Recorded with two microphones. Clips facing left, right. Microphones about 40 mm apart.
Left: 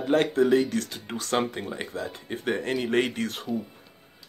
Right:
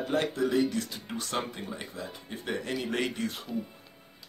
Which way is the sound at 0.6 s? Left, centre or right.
Left.